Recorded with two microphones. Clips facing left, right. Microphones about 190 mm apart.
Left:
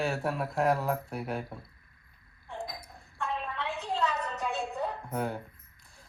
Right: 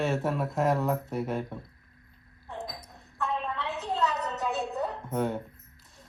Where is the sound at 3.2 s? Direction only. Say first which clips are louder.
Right 3 dB; centre (ahead or behind).